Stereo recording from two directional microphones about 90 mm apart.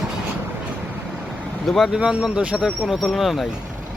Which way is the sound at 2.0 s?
10° right (ahead or behind).